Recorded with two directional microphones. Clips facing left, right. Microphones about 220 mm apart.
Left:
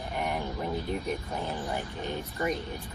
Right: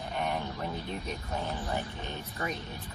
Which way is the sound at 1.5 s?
15° left (ahead or behind).